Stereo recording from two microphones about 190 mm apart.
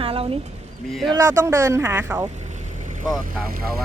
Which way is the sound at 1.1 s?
15° right (ahead or behind).